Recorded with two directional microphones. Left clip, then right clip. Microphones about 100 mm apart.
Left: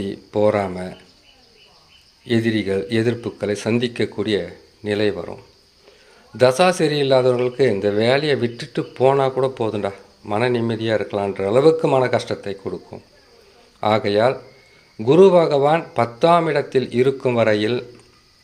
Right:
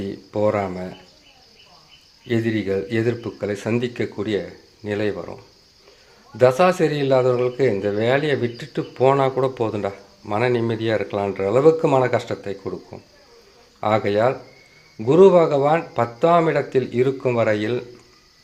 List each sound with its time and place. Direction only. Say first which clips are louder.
0.0 s speech: left 3 dB; 25° left (ahead or behind)
2.2 s a man's voice: left 2 dB; 20° left (ahead or behind)
13.8 s speech: left 2 dB; 25° left (ahead or behind)